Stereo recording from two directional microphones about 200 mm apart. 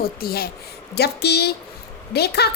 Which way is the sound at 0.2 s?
50° left (ahead or behind).